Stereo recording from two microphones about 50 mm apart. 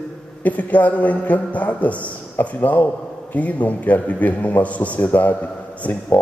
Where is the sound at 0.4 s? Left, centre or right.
Left.